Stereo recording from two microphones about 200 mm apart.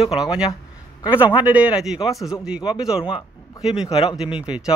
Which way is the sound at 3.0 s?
25° left (ahead or behind).